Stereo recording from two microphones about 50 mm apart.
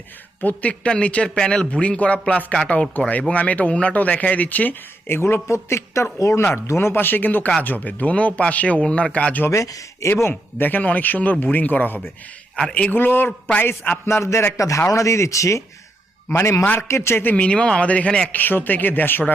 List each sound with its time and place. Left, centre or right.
0.4 s a man's voice: left
5.0 s speech: left
5.5 s speech: left
6.7 s a man's voice: left
9.5 s speech: left
10.6 s a man's voice: left
16.3 s a man's voice: left
17.3 s a man's voice: left
18.3 s speech: left